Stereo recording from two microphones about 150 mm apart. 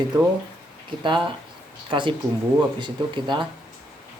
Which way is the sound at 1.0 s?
35° right (ahead or behind).